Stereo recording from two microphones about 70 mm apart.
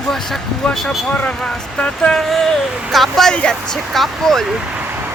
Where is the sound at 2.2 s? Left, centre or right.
Centre.